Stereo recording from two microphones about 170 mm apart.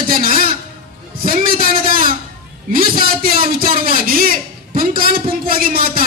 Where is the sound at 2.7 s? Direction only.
55° right (ahead or behind).